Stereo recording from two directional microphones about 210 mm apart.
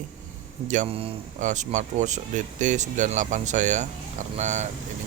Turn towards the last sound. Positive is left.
turn(degrees=-35)  # may be behind; listen again after turning